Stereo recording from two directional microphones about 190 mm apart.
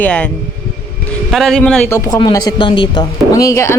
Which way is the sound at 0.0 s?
5° left (ahead or behind).